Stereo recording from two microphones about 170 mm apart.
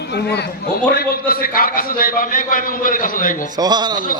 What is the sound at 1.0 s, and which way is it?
A man's voice, 60° left (ahead or behind).